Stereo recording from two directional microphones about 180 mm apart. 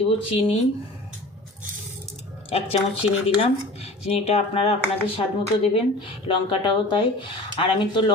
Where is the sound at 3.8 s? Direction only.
35° left (ahead or behind).